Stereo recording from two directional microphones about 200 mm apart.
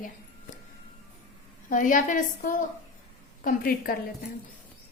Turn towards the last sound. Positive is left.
turn(degrees=45)  # may be behind; listen again after turning